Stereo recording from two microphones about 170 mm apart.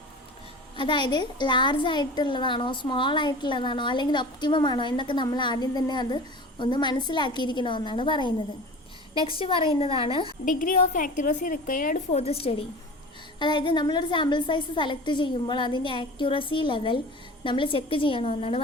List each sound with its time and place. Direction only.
0.8 s a woman's voice: 30° left (ahead or behind)
10.4 s a woman's voice: 55° left (ahead or behind)
12.1 s a woman's voice: 35° left (ahead or behind)